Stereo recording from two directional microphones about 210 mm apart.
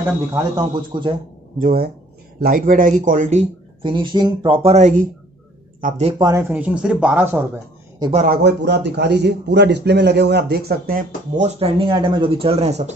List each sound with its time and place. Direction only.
0.3 s speech: 20° right (ahead or behind)
1.6 s a man's voice: 45° right (ahead or behind)
3.9 s speech: 20° right (ahead or behind)
6.5 s speech: 5° right (ahead or behind)
8.1 s speech: 35° right (ahead or behind)
8.4 s a man's voice: 50° right (ahead or behind); by 12.9 s 30° right (ahead or behind)